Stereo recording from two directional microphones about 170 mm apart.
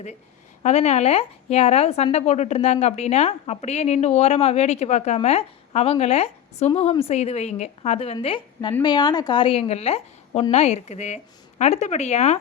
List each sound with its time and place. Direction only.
0.6 s a woman's voice: 40° left (ahead or behind)